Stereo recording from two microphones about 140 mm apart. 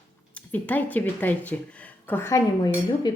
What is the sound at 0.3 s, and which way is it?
Speech, 10° left (ahead or behind).